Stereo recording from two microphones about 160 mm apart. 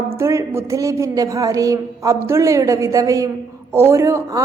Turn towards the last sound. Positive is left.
turn(degrees=-20)  # may be behind; listen again after turning